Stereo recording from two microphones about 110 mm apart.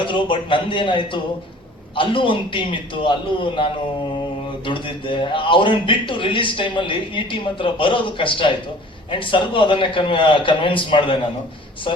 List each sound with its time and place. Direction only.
0.0 s speech: 50° left (ahead or behind)